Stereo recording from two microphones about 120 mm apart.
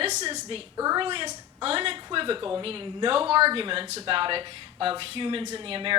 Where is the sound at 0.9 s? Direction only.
45° right (ahead or behind).